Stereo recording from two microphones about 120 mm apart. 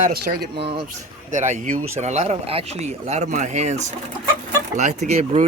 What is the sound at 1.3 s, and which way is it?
Speech, 85° right.